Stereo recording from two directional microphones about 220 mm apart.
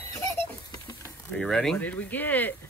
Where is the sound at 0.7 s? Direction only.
15° left (ahead or behind).